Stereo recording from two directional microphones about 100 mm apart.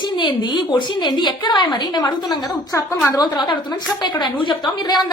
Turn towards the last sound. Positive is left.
turn(degrees=50)  # may be behind; listen again after turning